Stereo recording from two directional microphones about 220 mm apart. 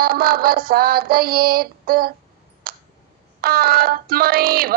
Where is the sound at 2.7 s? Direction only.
40° right (ahead or behind).